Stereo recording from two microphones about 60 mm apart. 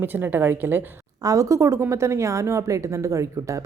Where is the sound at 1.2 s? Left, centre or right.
Right.